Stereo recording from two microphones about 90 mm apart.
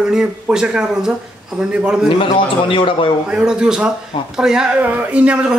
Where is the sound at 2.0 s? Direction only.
70° left (ahead or behind).